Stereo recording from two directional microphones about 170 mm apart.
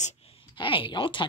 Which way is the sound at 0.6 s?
30° left (ahead or behind).